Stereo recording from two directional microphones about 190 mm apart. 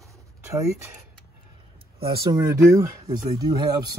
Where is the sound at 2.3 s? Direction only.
15° right (ahead or behind).